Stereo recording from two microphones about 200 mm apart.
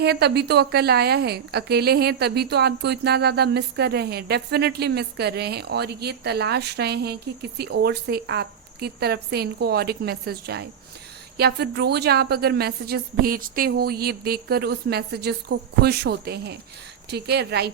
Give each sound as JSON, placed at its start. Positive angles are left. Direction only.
{"t": 0.0, "sound": "a woman's voice", "side_deg": -55}